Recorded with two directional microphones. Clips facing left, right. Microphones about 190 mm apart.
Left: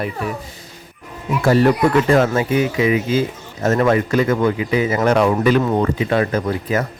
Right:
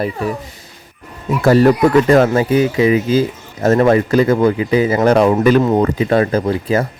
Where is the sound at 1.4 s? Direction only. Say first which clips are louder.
Right 4 dB; 40° right (ahead or behind).